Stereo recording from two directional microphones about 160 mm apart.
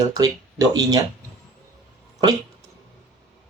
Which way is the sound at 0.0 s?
25° right (ahead or behind).